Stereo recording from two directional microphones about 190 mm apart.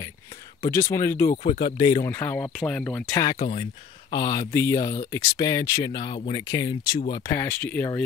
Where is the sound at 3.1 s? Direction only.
20° left (ahead or behind).